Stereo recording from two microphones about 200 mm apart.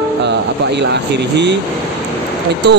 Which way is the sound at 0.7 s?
60° right (ahead or behind).